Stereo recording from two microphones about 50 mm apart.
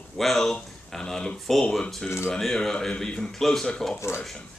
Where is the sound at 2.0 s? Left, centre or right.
Left.